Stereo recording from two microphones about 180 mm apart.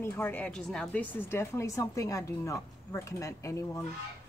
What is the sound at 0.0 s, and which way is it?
A woman's voice, 10° left (ahead or behind).